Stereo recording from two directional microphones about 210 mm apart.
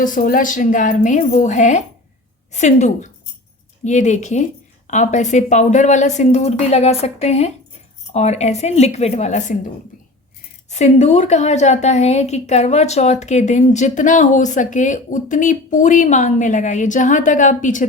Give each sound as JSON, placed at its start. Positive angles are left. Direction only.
{"t": 0.0, "sound": "a woman's voice", "side_deg": 40}